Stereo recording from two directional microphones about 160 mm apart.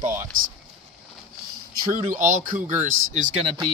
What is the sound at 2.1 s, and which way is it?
Speech, 55° right (ahead or behind).